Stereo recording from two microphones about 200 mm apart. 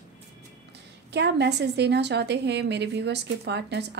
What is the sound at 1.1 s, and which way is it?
A woman's voice, 55° right (ahead or behind).